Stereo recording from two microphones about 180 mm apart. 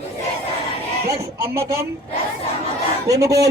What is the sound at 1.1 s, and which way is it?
Speech, 15° right (ahead or behind).